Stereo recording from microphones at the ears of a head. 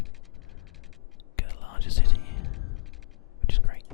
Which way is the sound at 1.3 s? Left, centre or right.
Left.